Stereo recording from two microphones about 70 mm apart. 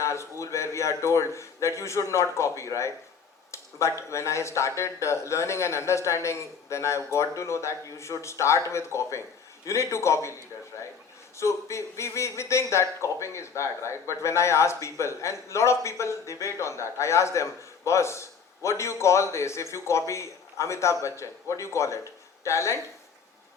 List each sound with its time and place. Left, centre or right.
0.0 s a man's voice: left
3.5 s a sound: left
4.1 s a man's voice: left
11.3 s a man's voice: left